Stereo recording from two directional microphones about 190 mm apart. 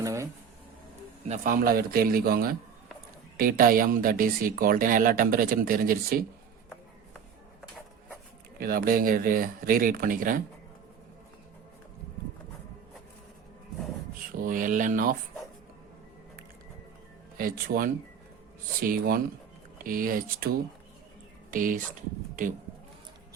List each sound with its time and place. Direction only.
0.0 s a sound: 15° right (ahead or behind)
1.3 s speech: 45° right (ahead or behind)
8.5 s speech: 50° right (ahead or behind)
14.3 s speech: 45° right (ahead or behind)
17.3 s speech: 50° right (ahead or behind)
21.5 s speech: 45° right (ahead or behind)